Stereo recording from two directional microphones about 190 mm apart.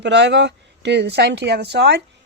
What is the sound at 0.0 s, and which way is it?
Speech, 65° right (ahead or behind).